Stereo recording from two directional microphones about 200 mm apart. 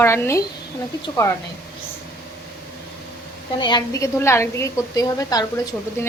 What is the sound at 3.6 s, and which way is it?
A woman's voice, 20° left (ahead or behind).